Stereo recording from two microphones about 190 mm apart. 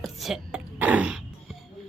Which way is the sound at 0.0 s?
Centre (ahead or behind).